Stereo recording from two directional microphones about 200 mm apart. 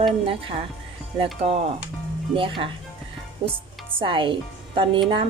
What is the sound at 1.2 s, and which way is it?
A woman's voice, 30° right (ahead or behind).